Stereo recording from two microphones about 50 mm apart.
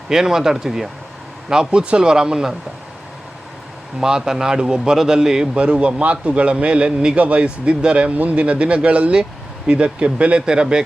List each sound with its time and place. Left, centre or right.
0.1 s a man's voice: centre
4.0 s a man's voice: centre
5.5 s speech: right